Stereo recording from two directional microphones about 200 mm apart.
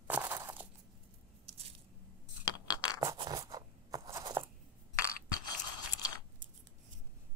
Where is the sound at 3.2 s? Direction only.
20° right (ahead or behind).